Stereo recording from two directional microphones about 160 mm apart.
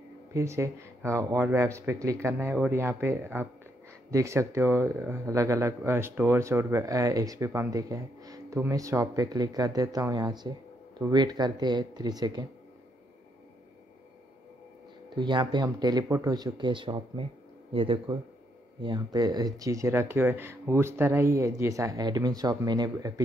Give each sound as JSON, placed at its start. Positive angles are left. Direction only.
{"t": 0.3, "sound": "speech", "side_deg": -15}
{"t": 15.1, "sound": "speech", "side_deg": -30}